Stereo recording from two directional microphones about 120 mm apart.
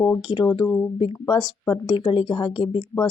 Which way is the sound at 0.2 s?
40° left (ahead or behind).